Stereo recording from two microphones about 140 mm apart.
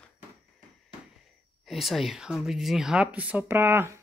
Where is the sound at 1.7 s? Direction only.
Centre (ahead or behind); by 4.0 s 15° right (ahead or behind).